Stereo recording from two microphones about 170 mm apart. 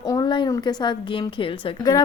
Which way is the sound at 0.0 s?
20° left (ahead or behind).